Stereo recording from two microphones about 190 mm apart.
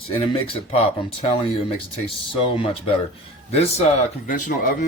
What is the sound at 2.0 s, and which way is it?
Speech, 30° left (ahead or behind).